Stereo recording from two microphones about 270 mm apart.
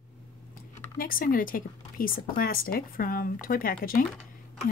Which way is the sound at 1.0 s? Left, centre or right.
Left.